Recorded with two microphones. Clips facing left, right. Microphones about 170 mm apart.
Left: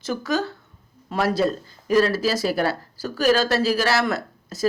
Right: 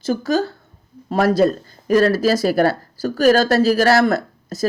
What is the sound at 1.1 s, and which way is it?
Speech, 45° right (ahead or behind).